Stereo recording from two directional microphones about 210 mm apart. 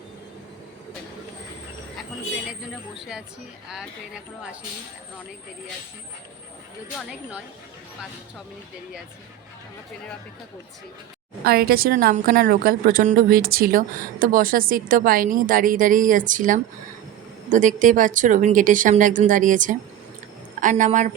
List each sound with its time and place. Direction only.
2.5 s speech: 5° right (ahead or behind)
7.1 s speech: 5° right (ahead or behind)
11.4 s a woman's voice: 45° right (ahead or behind)